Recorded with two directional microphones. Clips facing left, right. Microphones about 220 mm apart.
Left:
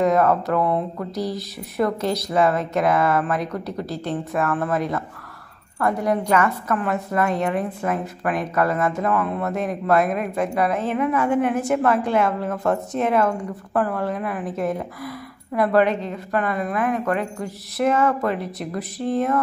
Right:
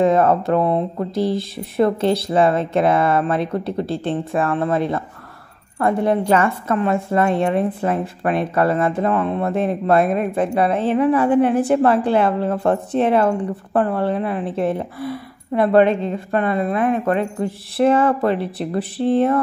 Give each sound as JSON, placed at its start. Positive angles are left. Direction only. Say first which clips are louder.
{"t": 0.0, "sound": "a woman's voice", "louder": "right 3 dB", "side_deg": -25}